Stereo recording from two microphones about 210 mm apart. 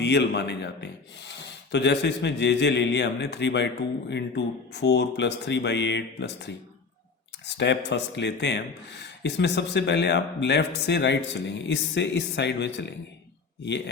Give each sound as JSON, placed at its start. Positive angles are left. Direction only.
{"t": 0.0, "sound": "a man's voice", "side_deg": 55}